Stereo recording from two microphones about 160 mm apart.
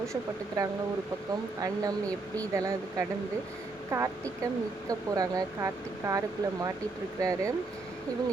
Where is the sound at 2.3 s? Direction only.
20° right (ahead or behind).